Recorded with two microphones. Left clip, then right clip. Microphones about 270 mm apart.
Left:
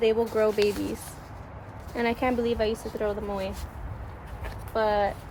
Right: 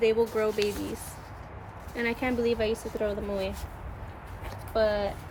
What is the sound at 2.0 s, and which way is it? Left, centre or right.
A woman's voice, centre.